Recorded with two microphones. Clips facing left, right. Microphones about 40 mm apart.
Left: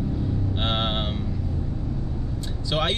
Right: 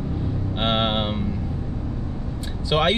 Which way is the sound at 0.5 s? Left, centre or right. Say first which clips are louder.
Right 6 dB; centre.